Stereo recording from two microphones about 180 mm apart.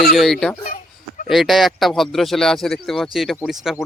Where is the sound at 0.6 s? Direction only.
50° left (ahead or behind).